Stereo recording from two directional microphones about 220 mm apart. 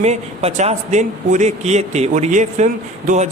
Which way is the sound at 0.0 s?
30° right (ahead or behind).